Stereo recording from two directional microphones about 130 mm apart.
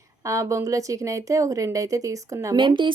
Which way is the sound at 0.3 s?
25° right (ahead or behind).